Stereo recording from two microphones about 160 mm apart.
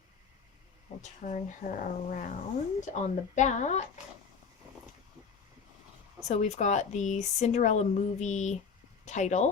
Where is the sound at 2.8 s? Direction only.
50° left (ahead or behind).